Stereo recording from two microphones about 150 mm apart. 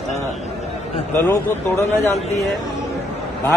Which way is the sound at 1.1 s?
15° left (ahead or behind).